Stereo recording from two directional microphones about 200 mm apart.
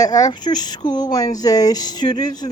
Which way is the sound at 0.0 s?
20° left (ahead or behind).